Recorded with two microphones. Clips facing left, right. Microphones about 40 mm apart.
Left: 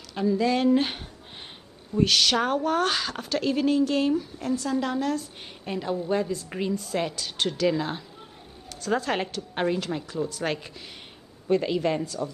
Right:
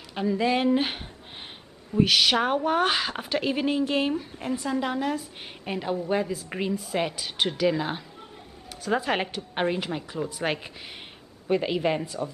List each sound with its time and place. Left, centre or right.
0.1 s a woman's voice: right